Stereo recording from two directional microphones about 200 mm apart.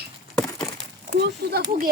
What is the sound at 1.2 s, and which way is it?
Speech, 50° right (ahead or behind).